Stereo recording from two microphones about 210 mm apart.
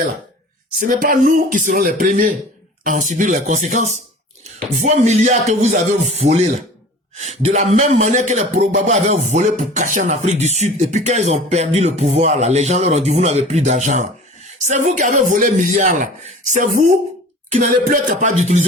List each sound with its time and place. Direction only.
0.8 s speech: 40° right (ahead or behind)
17.5 s speech: 40° right (ahead or behind)